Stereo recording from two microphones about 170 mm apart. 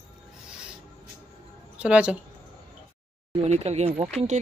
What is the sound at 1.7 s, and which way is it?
Speech, 5° right (ahead or behind).